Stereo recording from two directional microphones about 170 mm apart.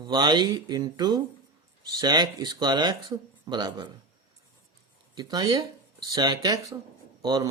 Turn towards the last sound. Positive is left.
turn(degrees=-25)  # may be behind; listen again after turning